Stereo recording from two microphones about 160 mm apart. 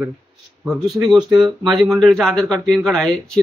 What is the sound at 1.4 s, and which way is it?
Speech, centre (ahead or behind).